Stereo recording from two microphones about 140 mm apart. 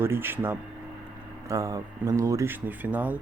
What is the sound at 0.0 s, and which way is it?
Speech, 15° right (ahead or behind).